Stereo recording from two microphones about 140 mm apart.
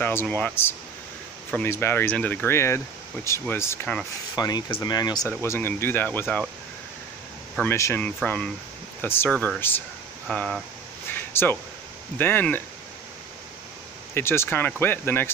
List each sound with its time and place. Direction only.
0.0 s speech: 15° left (ahead or behind)
4.4 s speech: 30° left (ahead or behind)
5.4 s speech: 15° left (ahead or behind)
7.6 s speech: 20° left (ahead or behind)
8.0 s speech: 10° left (ahead or behind)
11.1 s a sound: 15° left (ahead or behind)
12.2 s speech: 15° left (ahead or behind)
14.1 s speech: 15° left (ahead or behind)